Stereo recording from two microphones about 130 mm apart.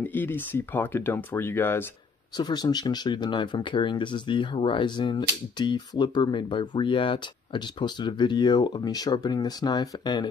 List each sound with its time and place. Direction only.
0.0 s speech: 15° left (ahead or behind)
2.3 s speech: 35° left (ahead or behind)